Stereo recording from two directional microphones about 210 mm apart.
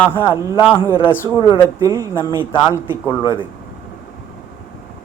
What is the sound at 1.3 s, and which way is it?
Speech, 25° left (ahead or behind).